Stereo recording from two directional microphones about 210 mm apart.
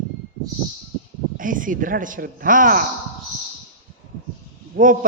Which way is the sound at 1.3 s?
40° right (ahead or behind).